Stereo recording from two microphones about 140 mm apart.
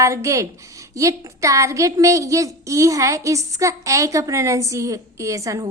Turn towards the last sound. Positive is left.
turn(degrees=-25)  # may be behind; listen again after turning